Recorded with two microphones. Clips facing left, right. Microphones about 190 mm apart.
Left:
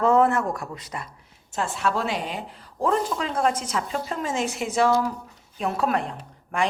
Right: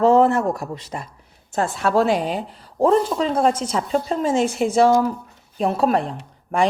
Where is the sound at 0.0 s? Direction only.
30° right (ahead or behind).